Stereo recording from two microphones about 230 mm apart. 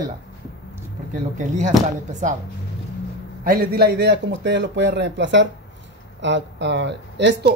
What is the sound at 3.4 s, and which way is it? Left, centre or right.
A man's voice, right.